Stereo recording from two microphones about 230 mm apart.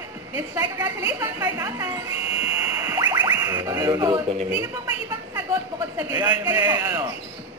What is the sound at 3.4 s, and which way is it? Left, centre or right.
Speech, centre.